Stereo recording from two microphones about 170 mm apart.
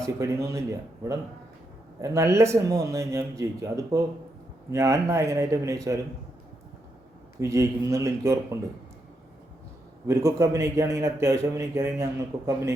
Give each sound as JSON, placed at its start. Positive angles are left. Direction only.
{"t": 0.0, "sound": "a man's voice", "side_deg": -20}
{"t": 7.3, "sound": "a man's voice", "side_deg": -20}
{"t": 10.1, "sound": "a man's voice", "side_deg": -20}